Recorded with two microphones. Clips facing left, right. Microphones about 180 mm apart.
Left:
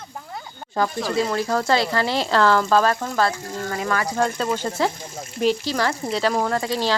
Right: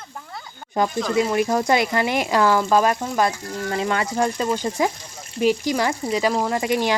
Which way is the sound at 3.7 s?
25° right (ahead or behind).